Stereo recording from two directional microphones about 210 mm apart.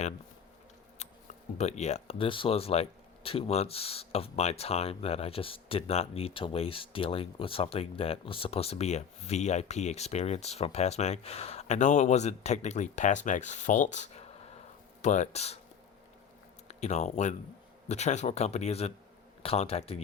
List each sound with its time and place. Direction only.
1.0 s a sound: 30° left (ahead or behind)
1.5 s speech: 30° left (ahead or behind)
16.6 s speech: 30° left (ahead or behind)